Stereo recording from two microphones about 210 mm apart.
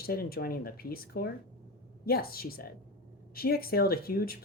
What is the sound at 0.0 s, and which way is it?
Speech, 45° left (ahead or behind).